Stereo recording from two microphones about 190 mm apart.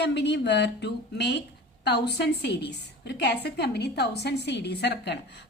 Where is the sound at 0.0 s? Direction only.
65° left (ahead or behind).